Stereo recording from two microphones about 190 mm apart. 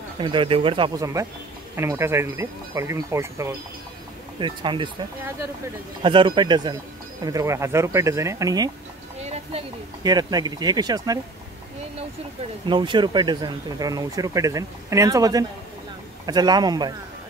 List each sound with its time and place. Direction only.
0.2 s speech: 25° right (ahead or behind)
4.4 s speech: 25° right (ahead or behind)
6.0 s speech: 25° right (ahead or behind)
9.2 s a sound: 35° right (ahead or behind)
10.0 s speech: 20° right (ahead or behind)
12.6 s speech: 25° right (ahead or behind)